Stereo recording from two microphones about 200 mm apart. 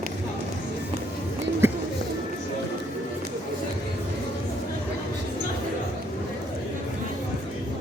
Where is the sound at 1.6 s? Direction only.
10° right (ahead or behind).